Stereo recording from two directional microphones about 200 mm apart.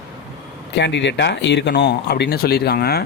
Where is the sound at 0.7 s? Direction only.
60° left (ahead or behind).